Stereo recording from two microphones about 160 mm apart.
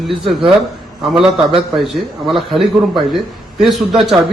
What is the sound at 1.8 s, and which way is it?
Speech, centre (ahead or behind).